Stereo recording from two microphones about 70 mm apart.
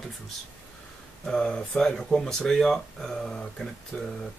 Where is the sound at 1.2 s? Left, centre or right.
Centre.